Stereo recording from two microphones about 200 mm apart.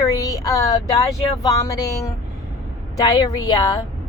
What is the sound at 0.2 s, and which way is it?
Speech, 15° left (ahead or behind).